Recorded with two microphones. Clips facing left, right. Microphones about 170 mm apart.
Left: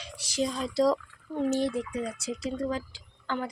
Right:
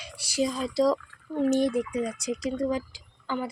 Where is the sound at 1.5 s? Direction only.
15° right (ahead or behind).